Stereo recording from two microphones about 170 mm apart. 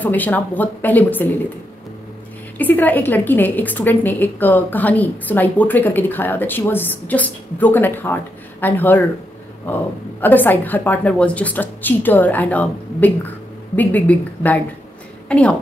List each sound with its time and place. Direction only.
0.0 s a woman's voice: 10° left (ahead or behind)
2.6 s a woman's voice: 10° left (ahead or behind)
10.2 s a woman's voice: 10° left (ahead or behind)